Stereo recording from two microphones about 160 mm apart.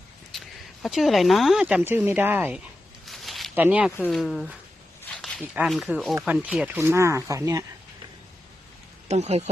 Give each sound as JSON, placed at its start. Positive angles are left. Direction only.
{"t": 0.3, "sound": "speech", "side_deg": 0}
{"t": 3.1, "sound": "a sound", "side_deg": 0}
{"t": 3.5, "sound": "speech", "side_deg": -10}
{"t": 5.1, "sound": "a sound", "side_deg": 5}
{"t": 5.6, "sound": "speech", "side_deg": 0}
{"t": 9.0, "sound": "speech", "side_deg": -45}